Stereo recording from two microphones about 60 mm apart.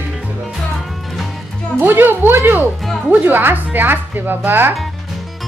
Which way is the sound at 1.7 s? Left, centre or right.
Right.